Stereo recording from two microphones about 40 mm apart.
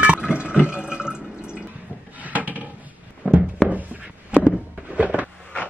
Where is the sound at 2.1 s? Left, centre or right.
Right.